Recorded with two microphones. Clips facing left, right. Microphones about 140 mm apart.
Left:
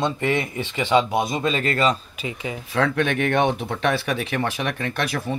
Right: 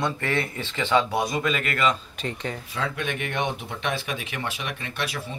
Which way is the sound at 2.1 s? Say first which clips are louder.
Left 1 dB; 5° left (ahead or behind).